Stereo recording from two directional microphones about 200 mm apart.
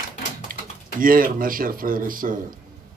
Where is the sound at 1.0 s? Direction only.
45° right (ahead or behind).